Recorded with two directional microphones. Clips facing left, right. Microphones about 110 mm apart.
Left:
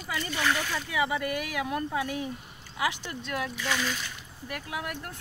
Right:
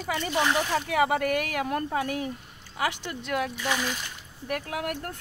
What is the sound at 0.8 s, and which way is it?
Speech, 60° right (ahead or behind).